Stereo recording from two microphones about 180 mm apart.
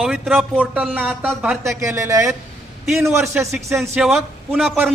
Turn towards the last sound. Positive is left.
turn(degrees=-5)  # may be behind; listen again after turning